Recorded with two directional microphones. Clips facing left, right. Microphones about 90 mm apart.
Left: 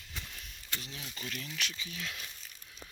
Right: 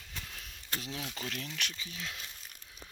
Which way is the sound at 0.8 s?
90° right.